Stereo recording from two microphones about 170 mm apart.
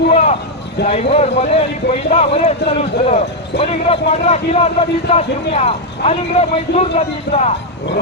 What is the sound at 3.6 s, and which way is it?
A man's voice, 35° left (ahead or behind).